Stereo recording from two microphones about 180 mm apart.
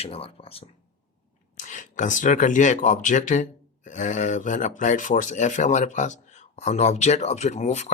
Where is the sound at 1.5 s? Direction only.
45° left (ahead or behind).